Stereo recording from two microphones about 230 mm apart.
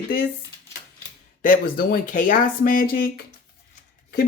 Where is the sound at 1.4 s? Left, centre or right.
Left.